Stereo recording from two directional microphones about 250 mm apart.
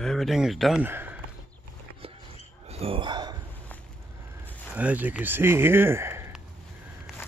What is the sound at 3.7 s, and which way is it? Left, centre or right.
Walk, centre.